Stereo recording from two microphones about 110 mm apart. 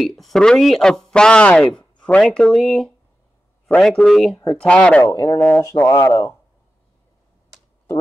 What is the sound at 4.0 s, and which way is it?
Speech, 5° left (ahead or behind).